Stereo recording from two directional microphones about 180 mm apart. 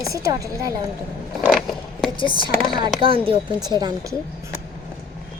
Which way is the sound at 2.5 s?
50° left (ahead or behind).